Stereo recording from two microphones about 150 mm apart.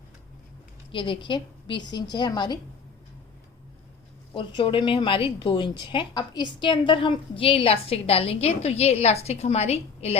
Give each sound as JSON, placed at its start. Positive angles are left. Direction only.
{"t": 0.9, "sound": "a woman's voice", "side_deg": 35}
{"t": 4.4, "sound": "a woman's voice", "side_deg": 35}